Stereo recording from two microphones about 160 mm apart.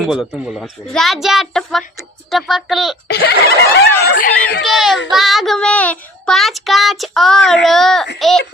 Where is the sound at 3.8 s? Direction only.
80° left.